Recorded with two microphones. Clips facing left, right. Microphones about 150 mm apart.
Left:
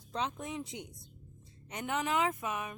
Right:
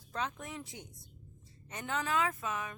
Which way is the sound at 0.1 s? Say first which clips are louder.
Left 2 dB; 20° left (ahead or behind).